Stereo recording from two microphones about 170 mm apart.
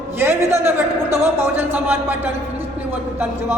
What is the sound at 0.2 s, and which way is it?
A man's voice, 15° right (ahead or behind).